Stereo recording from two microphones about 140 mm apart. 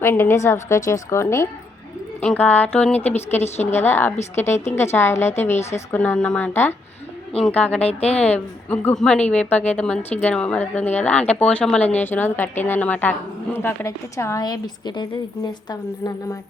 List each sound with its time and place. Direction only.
0.0 s a woman's voice: 15° left (ahead or behind)